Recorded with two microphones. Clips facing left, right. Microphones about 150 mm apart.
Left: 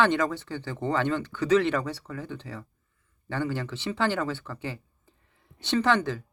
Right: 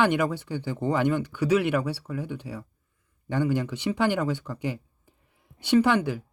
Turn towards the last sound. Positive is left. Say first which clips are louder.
# right 3 dB
turn(degrees=-10)  # may be behind; listen again after turning